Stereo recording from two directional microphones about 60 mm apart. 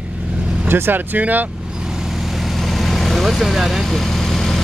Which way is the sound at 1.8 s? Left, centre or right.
Centre.